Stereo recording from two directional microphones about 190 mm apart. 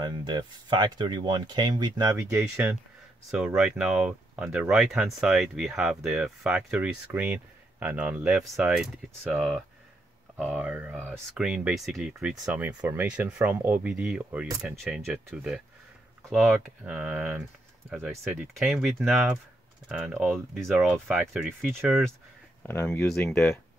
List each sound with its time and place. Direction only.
0.0 s speech: 25° right (ahead or behind)
2.3 s speech: 5° right (ahead or behind)
22.6 s speech: 10° left (ahead or behind)